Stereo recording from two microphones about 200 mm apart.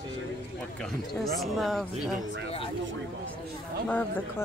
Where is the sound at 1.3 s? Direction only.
Centre (ahead or behind).